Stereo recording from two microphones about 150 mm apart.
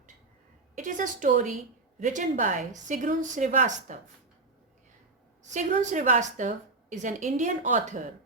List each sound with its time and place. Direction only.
0.8 s a woman's voice: 60° right (ahead or behind)
5.4 s a woman's voice: 55° right (ahead or behind)